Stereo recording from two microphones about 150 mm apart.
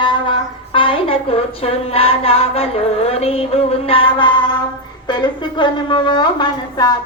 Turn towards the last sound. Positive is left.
turn(degrees=30)  # may be behind; listen again after turning